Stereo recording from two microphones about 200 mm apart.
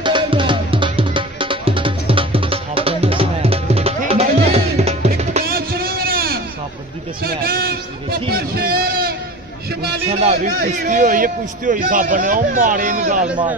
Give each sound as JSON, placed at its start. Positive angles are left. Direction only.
{"t": 0.0, "sound": "music", "side_deg": -25}
{"t": 5.5, "sound": "a sound", "side_deg": -50}
{"t": 10.0, "sound": "a man's voice", "side_deg": -35}
{"t": 10.6, "sound": "a man's voice", "side_deg": -45}